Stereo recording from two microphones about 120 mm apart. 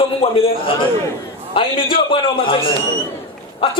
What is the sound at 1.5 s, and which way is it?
A man's voice, 50° left (ahead or behind).